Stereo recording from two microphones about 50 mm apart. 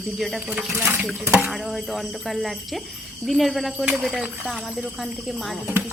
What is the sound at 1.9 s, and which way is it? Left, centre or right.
A woman's voice, centre.